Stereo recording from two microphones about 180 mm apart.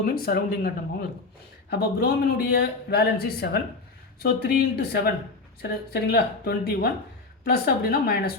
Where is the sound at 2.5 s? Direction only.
60° left (ahead or behind).